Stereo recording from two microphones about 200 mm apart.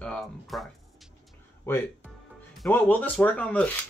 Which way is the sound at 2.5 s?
5° left (ahead or behind).